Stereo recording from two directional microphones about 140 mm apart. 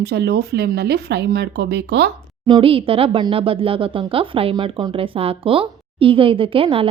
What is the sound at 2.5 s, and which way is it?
Speech, 35° right (ahead or behind).